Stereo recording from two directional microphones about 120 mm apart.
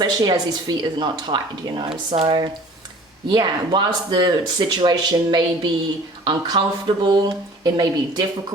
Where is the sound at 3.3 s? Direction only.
35° right (ahead or behind).